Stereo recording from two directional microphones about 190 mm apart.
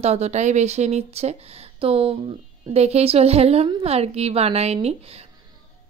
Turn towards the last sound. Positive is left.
turn(degrees=-35)  # may be behind; listen again after turning